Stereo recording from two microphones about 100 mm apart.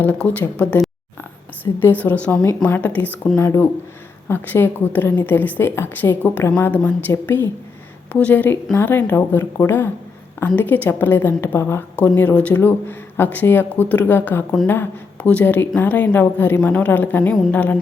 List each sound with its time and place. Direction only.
0.0 s a woman's voice: 15° left (ahead or behind)
3.3 s a woman's voice: 30° left (ahead or behind)